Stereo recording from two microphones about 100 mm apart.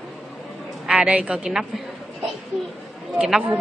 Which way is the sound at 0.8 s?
10° right (ahead or behind).